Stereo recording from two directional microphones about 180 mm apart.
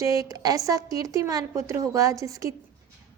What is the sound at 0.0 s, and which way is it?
A woman's voice, 20° right (ahead or behind).